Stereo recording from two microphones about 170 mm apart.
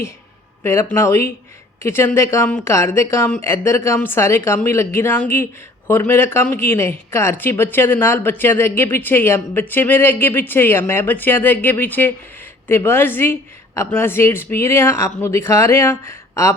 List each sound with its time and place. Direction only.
0.6 s speech: 15° left (ahead or behind)